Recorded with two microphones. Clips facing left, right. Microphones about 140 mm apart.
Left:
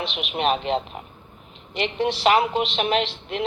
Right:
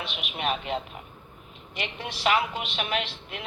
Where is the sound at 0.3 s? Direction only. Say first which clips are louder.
Left 7 dB; 25° left (ahead or behind).